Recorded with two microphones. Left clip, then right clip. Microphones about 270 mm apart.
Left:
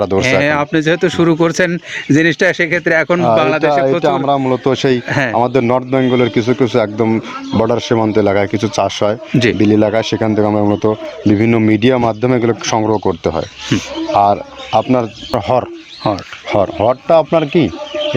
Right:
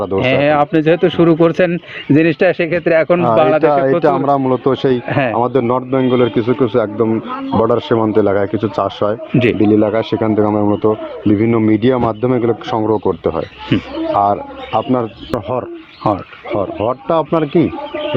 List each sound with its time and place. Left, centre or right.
0.2 s speech: left
5.0 s speech: centre
5.4 s speech: left
16.0 s speech: centre
16.5 s speech: left